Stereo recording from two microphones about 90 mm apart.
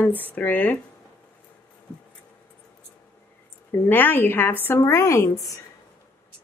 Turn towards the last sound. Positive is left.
turn(degrees=40)  # may be behind; listen again after turning